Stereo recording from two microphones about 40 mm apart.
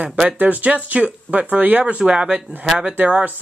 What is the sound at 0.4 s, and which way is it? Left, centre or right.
Speech, right.